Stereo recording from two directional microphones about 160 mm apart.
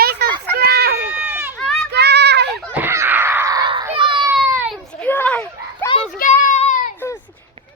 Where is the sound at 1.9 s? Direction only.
90° right.